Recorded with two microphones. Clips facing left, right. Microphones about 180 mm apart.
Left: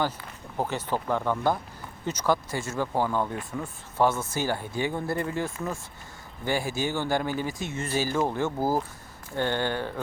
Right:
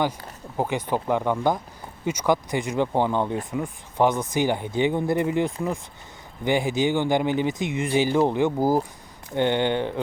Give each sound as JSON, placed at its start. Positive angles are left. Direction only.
{"t": 0.5, "sound": "speech", "side_deg": -15}